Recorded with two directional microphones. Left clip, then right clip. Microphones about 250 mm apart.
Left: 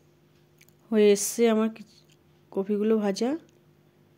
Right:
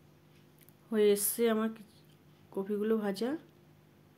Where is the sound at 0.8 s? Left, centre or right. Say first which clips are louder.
Left 7 dB; left.